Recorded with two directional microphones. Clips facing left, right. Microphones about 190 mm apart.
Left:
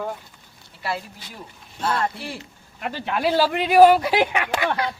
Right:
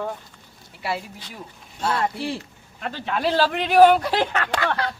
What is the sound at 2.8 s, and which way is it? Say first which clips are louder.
A man's voice: left 1 dB; 10° left (ahead or behind).